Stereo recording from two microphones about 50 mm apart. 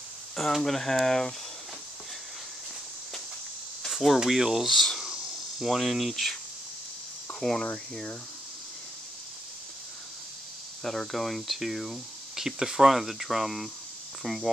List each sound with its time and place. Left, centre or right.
0.4 s speech: centre
3.8 s cricket: centre
4.3 s speech: centre
7.3 s speech: centre
10.8 s speech: centre